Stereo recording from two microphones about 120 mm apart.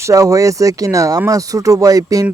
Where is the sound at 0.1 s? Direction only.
30° right (ahead or behind).